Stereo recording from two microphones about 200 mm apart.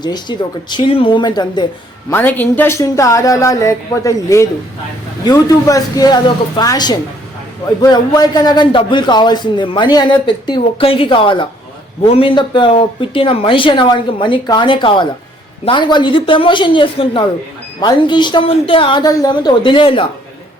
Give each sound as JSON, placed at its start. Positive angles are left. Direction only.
{"t": 0.0, "sound": "a man's voice", "side_deg": 20}
{"t": 2.0, "sound": "a man's voice", "side_deg": 10}